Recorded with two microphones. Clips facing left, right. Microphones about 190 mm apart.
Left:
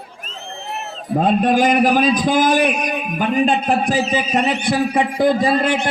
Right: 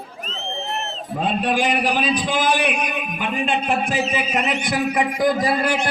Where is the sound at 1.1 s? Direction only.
45° left (ahead or behind).